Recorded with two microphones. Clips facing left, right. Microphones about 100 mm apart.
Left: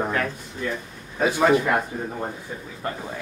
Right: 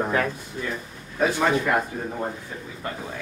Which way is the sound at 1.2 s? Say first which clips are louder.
Left 3 dB; 10° left (ahead or behind).